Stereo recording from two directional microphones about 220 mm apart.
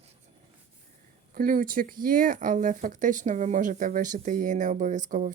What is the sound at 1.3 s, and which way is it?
Speech, 40° right (ahead or behind).